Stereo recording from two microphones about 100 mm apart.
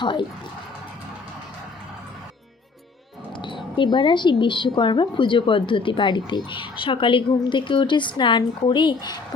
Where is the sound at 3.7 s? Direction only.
55° left (ahead or behind).